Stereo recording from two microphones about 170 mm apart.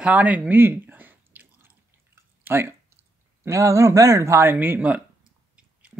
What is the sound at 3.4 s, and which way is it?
Speech, 15° right (ahead or behind).